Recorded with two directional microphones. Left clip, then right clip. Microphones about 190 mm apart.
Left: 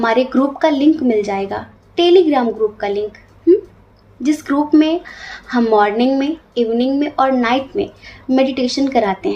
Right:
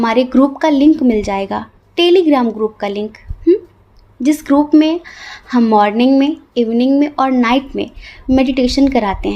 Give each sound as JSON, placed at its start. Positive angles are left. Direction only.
{"t": 0.0, "sound": "speech", "side_deg": -50}